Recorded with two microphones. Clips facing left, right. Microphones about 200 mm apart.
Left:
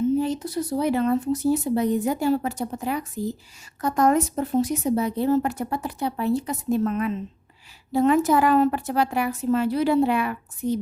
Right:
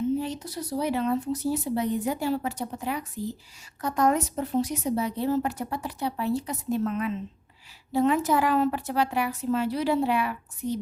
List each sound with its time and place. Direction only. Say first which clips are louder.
0.2 s speech: left 7 dB; 50° left (ahead or behind)